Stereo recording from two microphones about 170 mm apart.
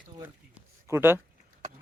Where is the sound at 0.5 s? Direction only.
15° right (ahead or behind).